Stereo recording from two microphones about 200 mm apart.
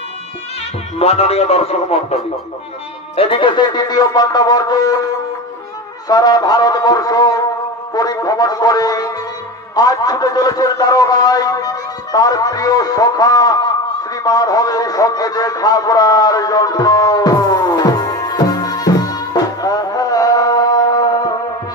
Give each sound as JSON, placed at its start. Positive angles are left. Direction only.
{"t": 0.9, "sound": "speech", "side_deg": 30}
{"t": 3.2, "sound": "a man's voice", "side_deg": 25}
{"t": 6.0, "sound": "a man's voice", "side_deg": 20}
{"t": 14.1, "sound": "a sound", "side_deg": 20}